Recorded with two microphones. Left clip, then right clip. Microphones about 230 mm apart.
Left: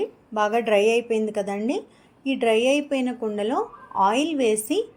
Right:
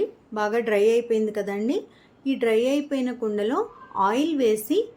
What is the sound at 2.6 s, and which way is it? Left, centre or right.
A woman's voice, centre.